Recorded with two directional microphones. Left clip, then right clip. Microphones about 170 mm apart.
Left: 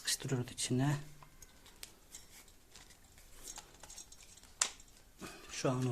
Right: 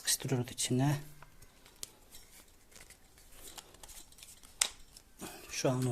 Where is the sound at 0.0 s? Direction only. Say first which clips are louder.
Right 3 dB; 20° right (ahead or behind).